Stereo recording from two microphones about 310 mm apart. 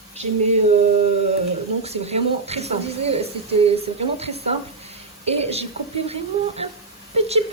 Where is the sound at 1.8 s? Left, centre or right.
Centre.